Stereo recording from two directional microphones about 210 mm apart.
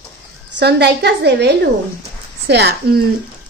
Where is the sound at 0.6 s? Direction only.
50° right (ahead or behind).